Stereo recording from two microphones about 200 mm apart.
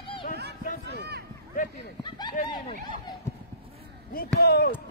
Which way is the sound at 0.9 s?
55° right (ahead or behind).